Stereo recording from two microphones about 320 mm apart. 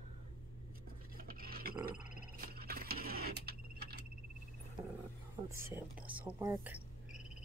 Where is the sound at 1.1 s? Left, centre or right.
Right.